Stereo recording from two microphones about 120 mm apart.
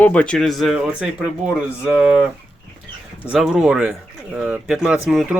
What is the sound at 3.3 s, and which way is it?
Speech, 5° right (ahead or behind).